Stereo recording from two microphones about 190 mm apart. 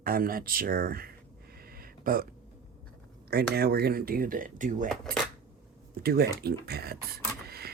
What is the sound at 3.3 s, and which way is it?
Speech, 55° right (ahead or behind).